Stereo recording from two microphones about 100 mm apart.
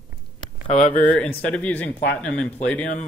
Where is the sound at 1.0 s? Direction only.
15° left (ahead or behind).